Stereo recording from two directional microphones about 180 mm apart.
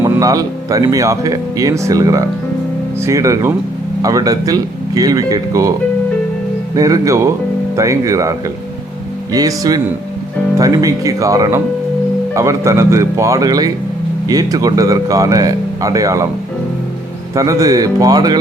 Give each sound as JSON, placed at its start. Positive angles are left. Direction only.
{"t": 0.0, "sound": "speech", "side_deg": -20}
{"t": 6.7, "sound": "speech", "side_deg": -20}
{"t": 17.3, "sound": "speech", "side_deg": -20}